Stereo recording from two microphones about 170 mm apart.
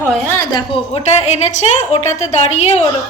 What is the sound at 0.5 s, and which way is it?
A woman's voice, 35° left (ahead or behind).